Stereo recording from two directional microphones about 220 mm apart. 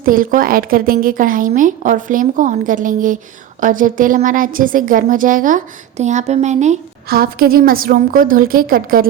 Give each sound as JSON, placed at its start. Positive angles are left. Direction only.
{"t": 0.0, "sound": "a woman's voice", "side_deg": -40}
{"t": 7.1, "sound": "a woman's voice", "side_deg": -45}